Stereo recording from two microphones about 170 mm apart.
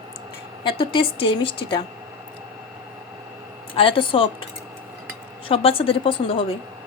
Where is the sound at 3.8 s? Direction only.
30° left (ahead or behind).